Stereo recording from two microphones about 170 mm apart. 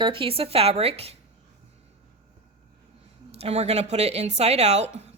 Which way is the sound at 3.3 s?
40° right (ahead or behind).